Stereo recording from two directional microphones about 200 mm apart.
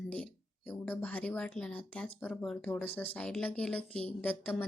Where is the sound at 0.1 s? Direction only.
5° left (ahead or behind).